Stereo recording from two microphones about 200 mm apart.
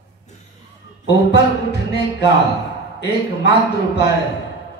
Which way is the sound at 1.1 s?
55° left (ahead or behind).